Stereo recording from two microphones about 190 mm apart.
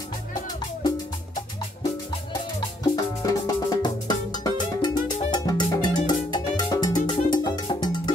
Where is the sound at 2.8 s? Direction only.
20° left (ahead or behind).